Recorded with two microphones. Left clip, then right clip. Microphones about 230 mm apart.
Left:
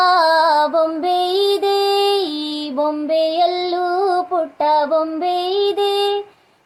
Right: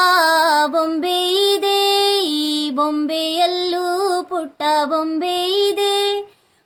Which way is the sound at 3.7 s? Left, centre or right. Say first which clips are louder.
Left 1 dB; right.